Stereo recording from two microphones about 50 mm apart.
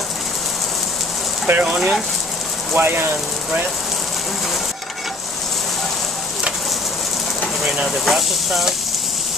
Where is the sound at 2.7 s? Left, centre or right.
Right.